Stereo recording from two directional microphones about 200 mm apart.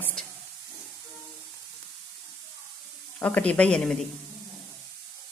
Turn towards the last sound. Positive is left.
turn(degrees=0)  # may be behind; listen again after turning